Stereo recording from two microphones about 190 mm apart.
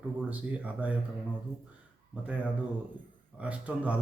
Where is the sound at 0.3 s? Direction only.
10° right (ahead or behind).